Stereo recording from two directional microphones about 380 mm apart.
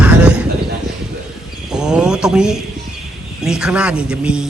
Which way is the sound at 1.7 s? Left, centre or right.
Centre.